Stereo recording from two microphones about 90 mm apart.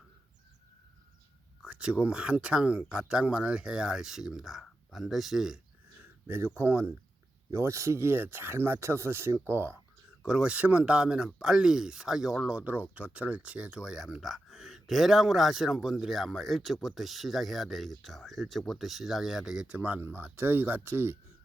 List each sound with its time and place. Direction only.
1.6 s speech: 10° right (ahead or behind)
6.0 s a sound: 25° right (ahead or behind)
6.6 s speech: 30° right (ahead or behind)
10.2 s speech: 10° right (ahead or behind)